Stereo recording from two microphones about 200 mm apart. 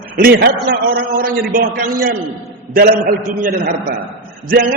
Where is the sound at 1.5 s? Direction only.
45° right (ahead or behind).